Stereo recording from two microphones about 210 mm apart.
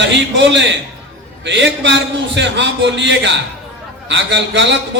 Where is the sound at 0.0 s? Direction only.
60° right (ahead or behind).